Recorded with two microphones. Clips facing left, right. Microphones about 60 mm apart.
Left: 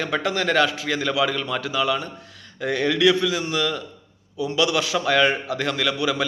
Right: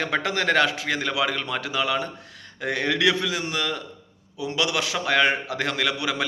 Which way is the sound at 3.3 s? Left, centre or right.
Right.